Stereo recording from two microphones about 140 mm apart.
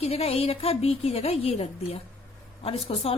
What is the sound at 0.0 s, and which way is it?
Speech, 45° left (ahead or behind).